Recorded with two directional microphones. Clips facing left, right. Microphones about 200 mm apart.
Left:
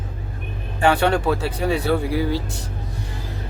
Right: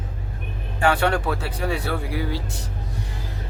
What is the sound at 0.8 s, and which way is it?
Speech, 25° left (ahead or behind).